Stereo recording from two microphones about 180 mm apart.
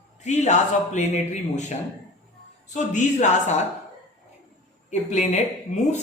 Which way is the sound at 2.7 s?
40° left (ahead or behind).